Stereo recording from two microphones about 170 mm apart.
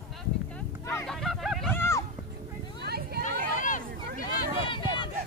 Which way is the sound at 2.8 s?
70° right (ahead or behind).